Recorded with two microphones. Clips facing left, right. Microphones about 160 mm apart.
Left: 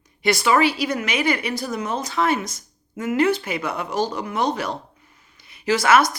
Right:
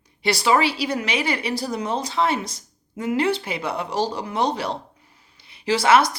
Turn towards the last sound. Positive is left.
turn(degrees=-30)  # may be behind; listen again after turning